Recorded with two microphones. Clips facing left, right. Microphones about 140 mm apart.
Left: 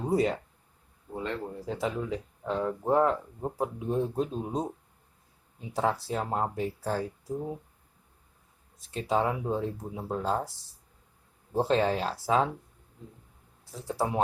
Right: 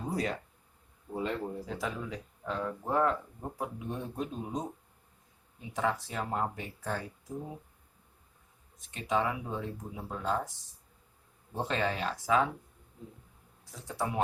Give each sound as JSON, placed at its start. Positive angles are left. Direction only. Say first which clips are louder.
{"t": 0.1, "sound": "speech", "louder": "left 8 dB", "side_deg": 25}
{"t": 1.1, "sound": "speech", "louder": "even", "side_deg": -5}
{"t": 1.6, "sound": "speech", "louder": "left 5 dB", "side_deg": 25}
{"t": 5.7, "sound": "speech", "louder": "left 4 dB", "side_deg": 35}
{"t": 8.8, "sound": "speech", "louder": "left 3 dB", "side_deg": 35}
{"t": 11.5, "sound": "speech", "louder": "left 7 dB", "side_deg": 35}
{"t": 13.7, "sound": "speech", "louder": "left 5 dB", "side_deg": 30}